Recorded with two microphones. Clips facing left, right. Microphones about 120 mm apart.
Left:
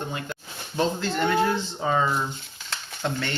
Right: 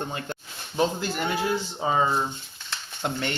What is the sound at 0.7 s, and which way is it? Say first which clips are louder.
Speech: even; 15° right (ahead or behind).